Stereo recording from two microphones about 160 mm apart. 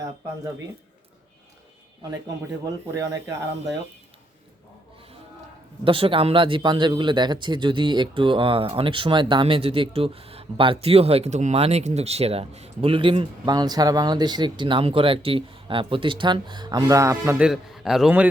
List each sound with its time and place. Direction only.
2.6 s speech: 20° right (ahead or behind)
5.8 s speech: 35° right (ahead or behind)
17.3 s a man's voice: 5° right (ahead or behind)